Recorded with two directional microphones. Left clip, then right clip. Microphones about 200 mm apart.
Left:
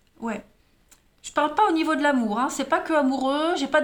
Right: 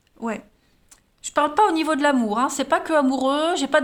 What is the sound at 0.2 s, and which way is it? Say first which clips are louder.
Speech: right 3 dB; 35° right (ahead or behind).